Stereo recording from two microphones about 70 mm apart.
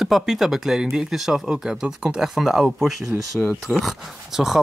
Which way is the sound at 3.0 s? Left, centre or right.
Right.